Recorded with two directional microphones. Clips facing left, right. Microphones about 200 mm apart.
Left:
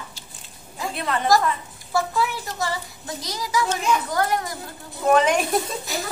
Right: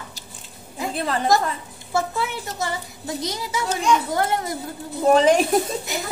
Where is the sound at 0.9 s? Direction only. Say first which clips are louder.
Even; 35° right (ahead or behind).